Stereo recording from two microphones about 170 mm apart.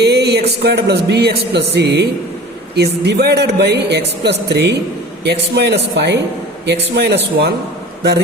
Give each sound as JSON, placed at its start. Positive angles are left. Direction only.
{"t": 0.0, "sound": "speech", "side_deg": -75}
{"t": 2.7, "sound": "speech", "side_deg": -75}